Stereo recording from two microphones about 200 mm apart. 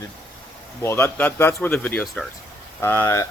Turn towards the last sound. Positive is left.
turn(degrees=15)  # may be behind; listen again after turning